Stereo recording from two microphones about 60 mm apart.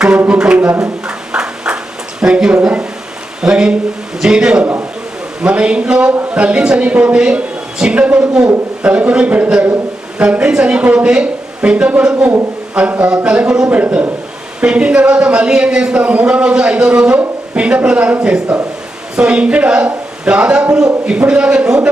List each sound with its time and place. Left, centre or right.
0.3 s a sound: centre
3.4 s a man's voice: centre
4.6 s a man's voice: right
5.4 s a man's voice: centre
14.6 s a man's voice: centre